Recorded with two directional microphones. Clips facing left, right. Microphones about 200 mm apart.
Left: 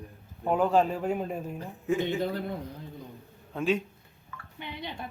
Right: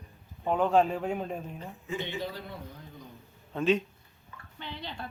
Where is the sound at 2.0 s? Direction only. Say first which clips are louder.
Left 7 dB; 50° left (ahead or behind).